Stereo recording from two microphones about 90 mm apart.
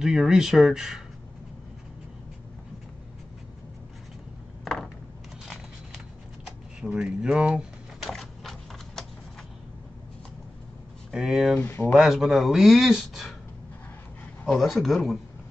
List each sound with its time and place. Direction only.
0.0 s speech: 5° right (ahead or behind)
7.0 s speech: 10° right (ahead or behind)
8.1 s a sound: 5° left (ahead or behind)
11.1 s speech: 5° right (ahead or behind)
11.6 s speech: 25° left (ahead or behind)
11.9 s speech: 5° right (ahead or behind)
14.4 s speech: centre (ahead or behind)